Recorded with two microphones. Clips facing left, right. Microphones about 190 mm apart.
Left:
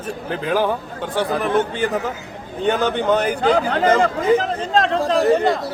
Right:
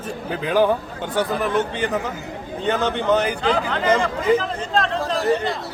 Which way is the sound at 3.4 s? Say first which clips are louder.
Left 4 dB; 45° left (ahead or behind).